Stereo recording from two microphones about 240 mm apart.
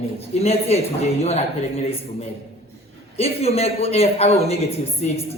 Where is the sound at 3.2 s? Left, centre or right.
Left.